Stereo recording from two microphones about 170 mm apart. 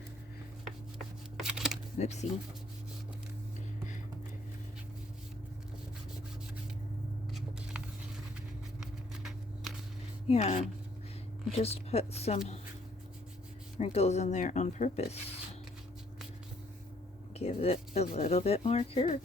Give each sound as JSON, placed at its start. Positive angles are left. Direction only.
{"t": 1.4, "sound": "a sound", "side_deg": -5}
{"t": 2.0, "sound": "speech", "side_deg": 40}
{"t": 8.8, "sound": "a sound", "side_deg": 0}
{"t": 10.2, "sound": "speech", "side_deg": 40}
{"t": 13.7, "sound": "speech", "side_deg": 40}
{"t": 17.3, "sound": "speech", "side_deg": 35}